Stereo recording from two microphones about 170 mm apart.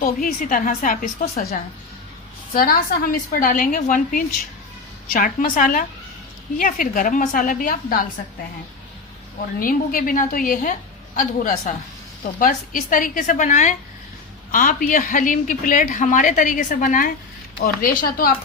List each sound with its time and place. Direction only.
0.0 s a woman's voice: 55° left (ahead or behind)
9.6 s a woman's voice: 55° left (ahead or behind)